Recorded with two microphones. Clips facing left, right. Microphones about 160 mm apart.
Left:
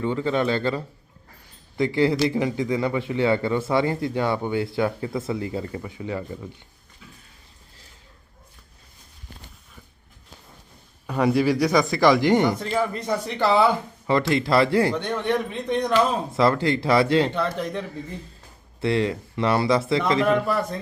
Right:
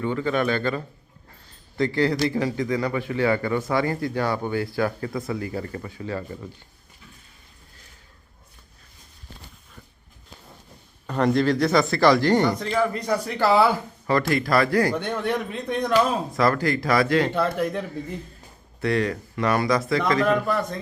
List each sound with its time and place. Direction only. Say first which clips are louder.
0.0 s a man's voice: left 1 dB; 25° left (ahead or behind)
1.8 s a man's voice: left 1 dB; 20° left (ahead or behind)
11.0 s a man's voice: even; 5° left (ahead or behind)
13.0 s a man's voice: right 1 dB; centre (ahead or behind)
14.1 s a man's voice: left 1 dB; 25° left (ahead or behind)
14.9 s a man's voice: left 1 dB; 5° right (ahead or behind)
16.3 s a man's voice: left 1 dB; 25° left (ahead or behind)
17.3 s speech: right 2 dB; 10° right (ahead or behind)
18.8 s a man's voice: left 1 dB; 25° left (ahead or behind)